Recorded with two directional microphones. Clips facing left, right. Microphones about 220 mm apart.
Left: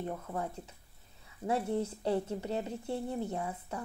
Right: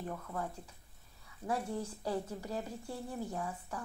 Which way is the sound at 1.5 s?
25° left (ahead or behind).